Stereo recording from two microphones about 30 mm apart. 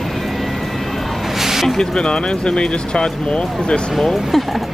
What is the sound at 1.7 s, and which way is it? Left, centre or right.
Speech, left.